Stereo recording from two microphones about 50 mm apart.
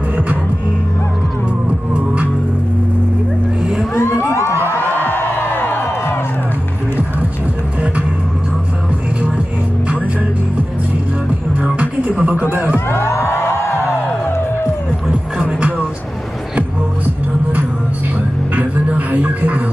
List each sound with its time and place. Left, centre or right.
4.3 s a sound: left
4.9 s music: left
11.6 s music: right
12.7 s music: left
17.0 s music: right